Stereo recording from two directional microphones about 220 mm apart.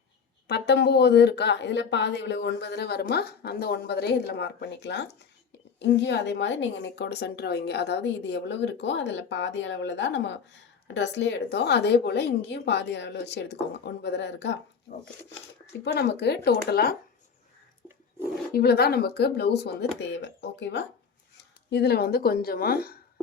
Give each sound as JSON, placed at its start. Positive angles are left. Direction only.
{"t": 0.4, "sound": "a woman's voice", "side_deg": 50}
{"t": 15.8, "sound": "a woman's voice", "side_deg": 50}
{"t": 18.5, "sound": "a woman's voice", "side_deg": 45}